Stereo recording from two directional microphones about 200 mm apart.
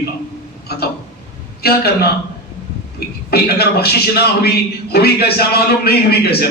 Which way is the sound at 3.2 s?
50° left (ahead or behind).